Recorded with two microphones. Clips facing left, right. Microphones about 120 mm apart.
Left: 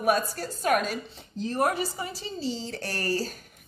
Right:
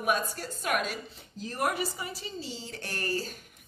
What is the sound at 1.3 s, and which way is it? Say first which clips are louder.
A woman's voice: left 5 dB; 25° left (ahead or behind).